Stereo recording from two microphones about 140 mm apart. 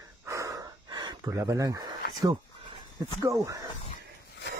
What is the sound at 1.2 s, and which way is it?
Speech, 20° right (ahead or behind).